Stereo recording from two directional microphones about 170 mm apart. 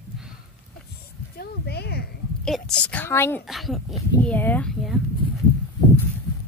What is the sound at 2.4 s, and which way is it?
A woman's voice, 5° left (ahead or behind).